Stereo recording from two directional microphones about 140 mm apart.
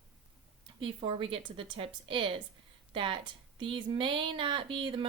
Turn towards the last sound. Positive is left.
turn(degrees=-40)  # may be behind; listen again after turning